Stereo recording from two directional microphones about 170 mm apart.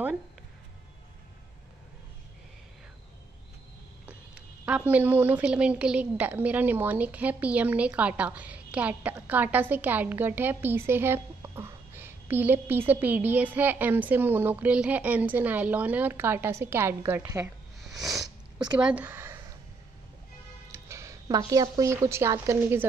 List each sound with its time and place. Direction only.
4.0 s speech: 10° right (ahead or behind)
17.8 s cat: centre (ahead or behind)
18.8 s speech: 10° right (ahead or behind)
20.7 s a woman's voice: 15° right (ahead or behind)